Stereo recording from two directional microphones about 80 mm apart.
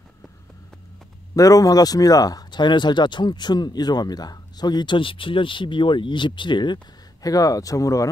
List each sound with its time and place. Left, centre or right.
1.3 s speech: left
7.2 s speech: left